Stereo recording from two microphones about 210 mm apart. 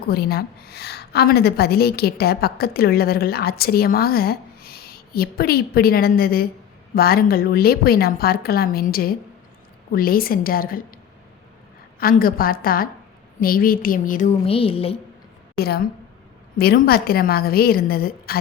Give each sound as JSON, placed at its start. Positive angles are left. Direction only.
{"t": 0.1, "sound": "a woman's voice", "side_deg": 45}
{"t": 11.9, "sound": "a woman's voice", "side_deg": 45}
{"t": 14.4, "sound": "a woman's voice", "side_deg": 25}
{"t": 15.5, "sound": "a woman's voice", "side_deg": 50}